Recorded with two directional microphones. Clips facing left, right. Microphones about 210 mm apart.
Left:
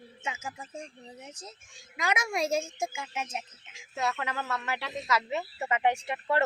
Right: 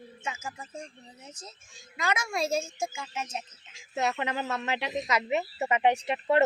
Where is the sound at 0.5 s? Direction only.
Centre (ahead or behind).